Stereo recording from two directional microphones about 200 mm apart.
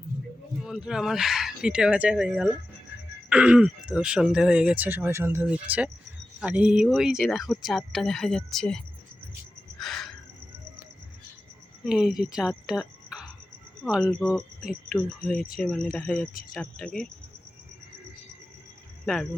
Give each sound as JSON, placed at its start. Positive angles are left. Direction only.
{"t": 0.6, "sound": "speech", "side_deg": -5}
{"t": 9.8, "sound": "cricket", "side_deg": 0}
{"t": 11.9, "sound": "speech", "side_deg": 0}
{"t": 15.4, "sound": "speech", "side_deg": 45}
{"t": 15.6, "sound": "speech", "side_deg": 5}
{"t": 16.3, "sound": "speech", "side_deg": 45}
{"t": 16.6, "sound": "speech", "side_deg": 5}
{"t": 19.0, "sound": "speech", "side_deg": 0}